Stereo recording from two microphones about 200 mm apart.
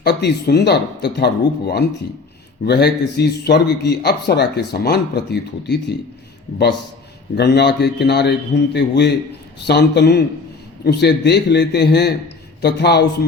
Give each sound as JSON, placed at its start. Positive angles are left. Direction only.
{"t": 0.0, "sound": "a man's voice", "side_deg": 55}
{"t": 7.3, "sound": "a man's voice", "side_deg": 55}